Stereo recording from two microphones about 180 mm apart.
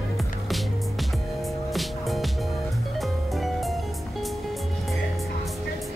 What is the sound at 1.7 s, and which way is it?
Music, centre (ahead or behind).